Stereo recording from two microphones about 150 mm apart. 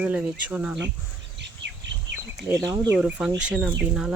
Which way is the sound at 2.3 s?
Centre (ahead or behind).